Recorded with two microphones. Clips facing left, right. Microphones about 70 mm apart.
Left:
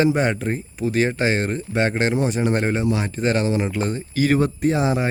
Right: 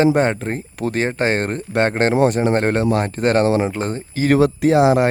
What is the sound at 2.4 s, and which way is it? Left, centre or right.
Speech, right.